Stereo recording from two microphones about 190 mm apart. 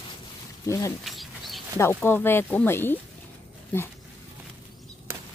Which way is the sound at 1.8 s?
10° left (ahead or behind).